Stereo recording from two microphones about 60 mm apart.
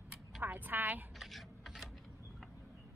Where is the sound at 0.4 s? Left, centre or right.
Right.